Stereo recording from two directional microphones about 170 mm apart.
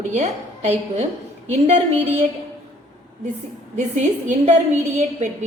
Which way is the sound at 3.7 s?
45° right (ahead or behind).